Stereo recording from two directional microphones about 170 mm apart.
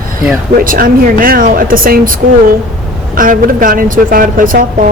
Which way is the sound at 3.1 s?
55° right (ahead or behind).